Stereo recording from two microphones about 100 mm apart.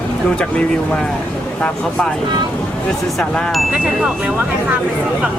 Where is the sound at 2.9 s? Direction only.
5° left (ahead or behind).